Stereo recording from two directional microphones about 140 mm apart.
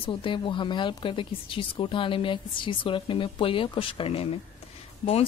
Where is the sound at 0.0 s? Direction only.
35° left (ahead or behind).